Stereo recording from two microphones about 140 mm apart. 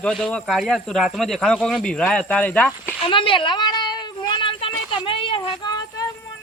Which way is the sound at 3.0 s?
40° left (ahead or behind).